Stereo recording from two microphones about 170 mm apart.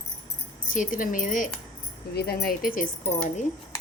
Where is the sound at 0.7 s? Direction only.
50° left (ahead or behind).